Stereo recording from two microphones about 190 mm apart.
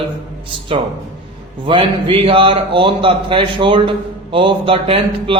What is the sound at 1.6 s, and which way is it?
A man's voice, 25° right (ahead or behind).